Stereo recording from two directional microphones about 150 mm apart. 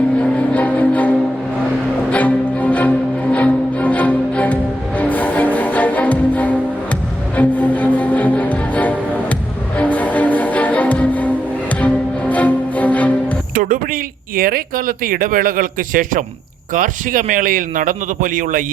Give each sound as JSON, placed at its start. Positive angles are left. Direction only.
{"t": 0.2, "sound": "music", "side_deg": 10}
{"t": 12.3, "sound": "music", "side_deg": 10}
{"t": 13.5, "sound": "a sound", "side_deg": -70}
{"t": 16.7, "sound": "a man's voice", "side_deg": -60}